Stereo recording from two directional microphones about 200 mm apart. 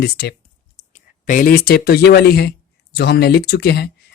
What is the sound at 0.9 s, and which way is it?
Speech, 40° left (ahead or behind).